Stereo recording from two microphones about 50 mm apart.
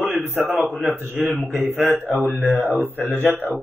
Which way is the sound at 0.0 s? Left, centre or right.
Right.